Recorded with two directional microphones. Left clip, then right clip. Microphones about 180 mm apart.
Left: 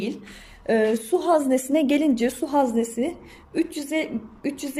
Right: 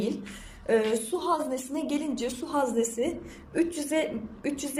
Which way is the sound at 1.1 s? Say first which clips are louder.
Left 8 dB; 40° left (ahead or behind).